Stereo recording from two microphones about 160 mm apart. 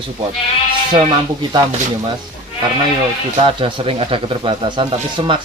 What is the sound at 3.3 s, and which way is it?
Speech, 35° right (ahead or behind).